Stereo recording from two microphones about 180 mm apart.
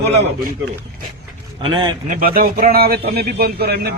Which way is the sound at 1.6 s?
25° right (ahead or behind).